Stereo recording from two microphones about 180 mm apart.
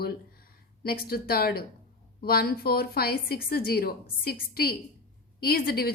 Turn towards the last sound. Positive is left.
turn(degrees=60)  # may be behind; listen again after turning